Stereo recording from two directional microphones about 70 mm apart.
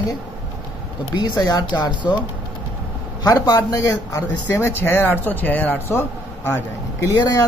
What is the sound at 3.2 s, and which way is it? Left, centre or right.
Speech, left.